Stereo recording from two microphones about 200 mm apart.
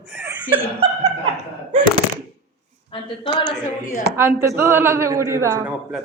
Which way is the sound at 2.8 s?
25° left (ahead or behind).